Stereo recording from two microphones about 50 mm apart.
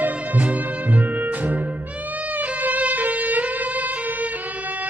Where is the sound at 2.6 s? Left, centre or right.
Right.